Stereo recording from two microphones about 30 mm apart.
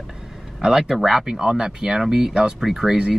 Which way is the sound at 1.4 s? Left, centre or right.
Right.